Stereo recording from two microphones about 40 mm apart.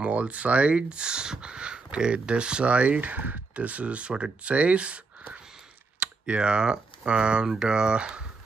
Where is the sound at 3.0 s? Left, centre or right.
Right.